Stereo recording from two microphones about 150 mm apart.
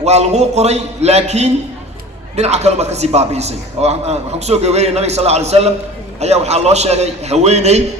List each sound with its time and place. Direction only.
0.0 s a man's voice: 45° right (ahead or behind)